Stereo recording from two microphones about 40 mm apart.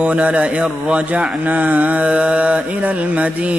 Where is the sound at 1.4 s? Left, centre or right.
Right.